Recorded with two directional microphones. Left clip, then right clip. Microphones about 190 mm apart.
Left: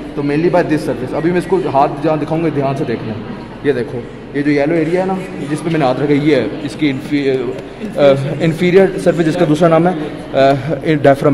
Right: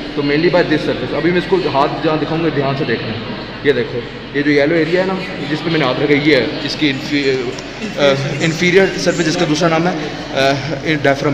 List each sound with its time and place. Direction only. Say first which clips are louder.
0.3 s a man's voice: even; 40° left (ahead or behind)
4.4 s a man's voice: right 1 dB; 45° left (ahead or behind); by 9.7 s 60° left (ahead or behind)
9.7 s speech: left 3 dB; 45° left (ahead or behind)